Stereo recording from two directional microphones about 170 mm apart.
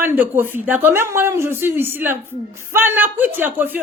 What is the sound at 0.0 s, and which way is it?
Speech, 10° right (ahead or behind).